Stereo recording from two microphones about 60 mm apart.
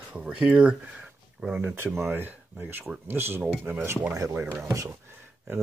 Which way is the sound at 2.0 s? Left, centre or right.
Right.